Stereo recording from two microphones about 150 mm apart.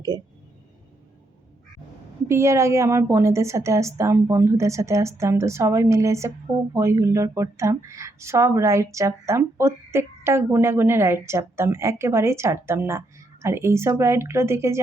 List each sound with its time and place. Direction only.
2.2 s speech: 20° right (ahead or behind)